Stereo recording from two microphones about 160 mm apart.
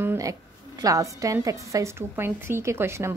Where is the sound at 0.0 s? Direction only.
15° right (ahead or behind).